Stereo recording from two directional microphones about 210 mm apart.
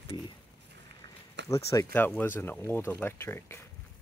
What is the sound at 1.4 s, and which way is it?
Speech, 15° left (ahead or behind).